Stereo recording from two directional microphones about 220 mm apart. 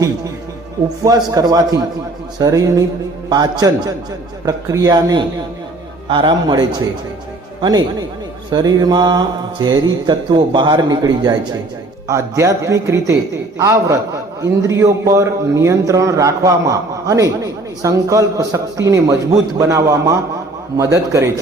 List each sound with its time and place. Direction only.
1.0 s a man's voice: 15° right (ahead or behind)
6.1 s mantra: 20° right (ahead or behind)
8.4 s mantra: 20° right (ahead or behind)
12.0 s a man's voice: 15° right (ahead or behind)